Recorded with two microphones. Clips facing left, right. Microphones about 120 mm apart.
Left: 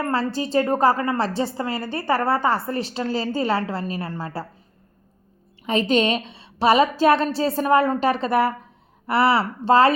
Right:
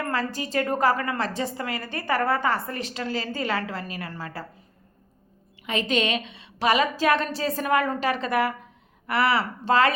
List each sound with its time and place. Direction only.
0.0 s a woman's voice: 30° left (ahead or behind)
5.6 s a woman's voice: 35° left (ahead or behind)